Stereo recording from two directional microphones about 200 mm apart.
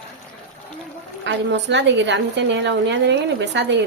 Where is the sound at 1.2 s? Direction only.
60° right (ahead or behind).